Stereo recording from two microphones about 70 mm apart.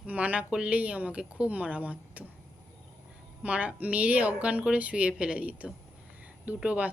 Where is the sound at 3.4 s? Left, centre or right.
Centre.